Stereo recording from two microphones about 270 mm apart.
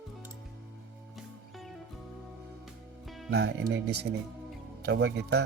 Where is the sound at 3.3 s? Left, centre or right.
Right.